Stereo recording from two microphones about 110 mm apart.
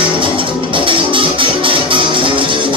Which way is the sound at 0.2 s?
50° right (ahead or behind).